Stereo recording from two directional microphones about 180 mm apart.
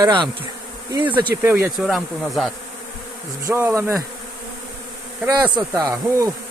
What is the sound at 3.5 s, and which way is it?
Speech, 15° right (ahead or behind).